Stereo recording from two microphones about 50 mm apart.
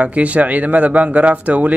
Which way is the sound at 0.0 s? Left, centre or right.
Right.